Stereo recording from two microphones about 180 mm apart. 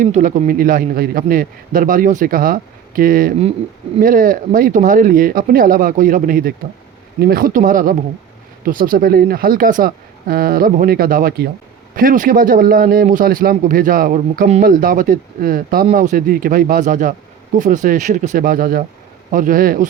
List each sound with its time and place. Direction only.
0.0 s speech: 45° right (ahead or behind)